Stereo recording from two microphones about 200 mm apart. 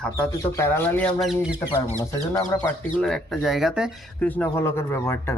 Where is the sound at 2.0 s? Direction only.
15° left (ahead or behind).